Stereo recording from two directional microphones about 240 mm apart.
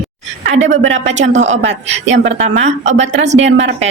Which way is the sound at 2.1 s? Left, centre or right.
Right.